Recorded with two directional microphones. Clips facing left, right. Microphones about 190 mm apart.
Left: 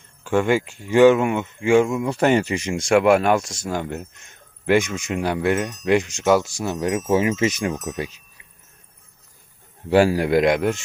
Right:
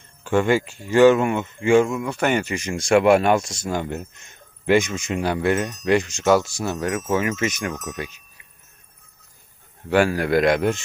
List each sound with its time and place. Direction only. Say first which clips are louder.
0.3 s speech: even; 10° left (ahead or behind)
2.0 s speech: left 3 dB; 30° left (ahead or behind)
2.9 s speech: even; 5° left (ahead or behind); by 8.1 s 25° left (ahead or behind)
9.9 s a man's voice: left 3 dB; 30° left (ahead or behind)
10.2 s speech: left 1 dB; 20° left (ahead or behind)
10.6 s speech: even; 5° left (ahead or behind)